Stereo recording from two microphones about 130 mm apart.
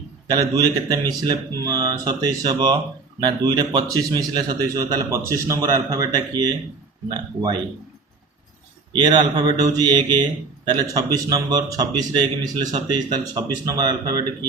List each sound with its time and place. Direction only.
0.3 s a man's voice: 30° right (ahead or behind)
8.9 s a man's voice: 35° right (ahead or behind)